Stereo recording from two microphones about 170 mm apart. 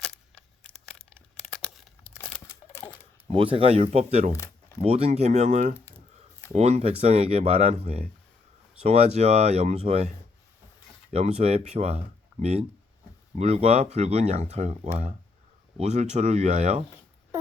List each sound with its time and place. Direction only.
0.0 s tearing: 5° left (ahead or behind)
2.1 s a sound: 10° left (ahead or behind)
3.2 s speech: 35° right (ahead or behind)
4.3 s a sound: 15° left (ahead or behind)
4.8 s speech: 35° right (ahead or behind)
15.8 s speech: 40° right (ahead or behind)